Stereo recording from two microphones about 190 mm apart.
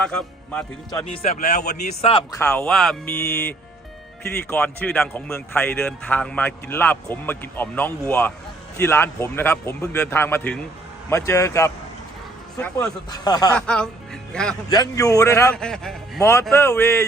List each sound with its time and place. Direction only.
0.0 s speech: 5° left (ahead or behind)
1.0 s speech: 35° left (ahead or behind)
2.4 s speech: 5° left (ahead or behind)
12.8 s speech: 20° left (ahead or behind)
13.6 s speech: 5° left (ahead or behind)
14.7 s speech: 20° left (ahead or behind)
15.5 s speech: 5° left (ahead or behind)
16.2 s speech: 15° left (ahead or behind)